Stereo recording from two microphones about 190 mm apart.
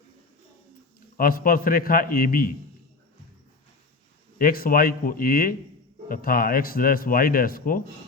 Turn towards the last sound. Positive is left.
turn(degrees=50)  # may be behind; listen again after turning